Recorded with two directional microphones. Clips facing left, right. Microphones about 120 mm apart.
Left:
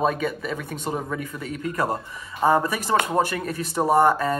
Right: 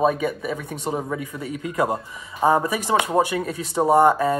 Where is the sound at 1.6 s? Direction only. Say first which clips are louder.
Right 2 dB; 20° right (ahead or behind).